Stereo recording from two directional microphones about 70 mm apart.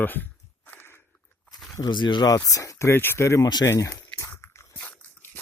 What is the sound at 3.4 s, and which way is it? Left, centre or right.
Speech, left.